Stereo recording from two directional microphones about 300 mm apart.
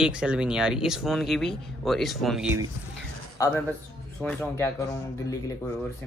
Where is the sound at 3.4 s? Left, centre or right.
Centre.